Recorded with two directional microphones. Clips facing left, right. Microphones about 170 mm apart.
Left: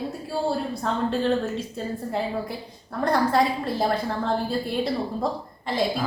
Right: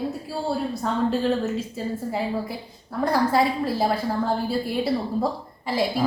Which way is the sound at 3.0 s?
5° right (ahead or behind).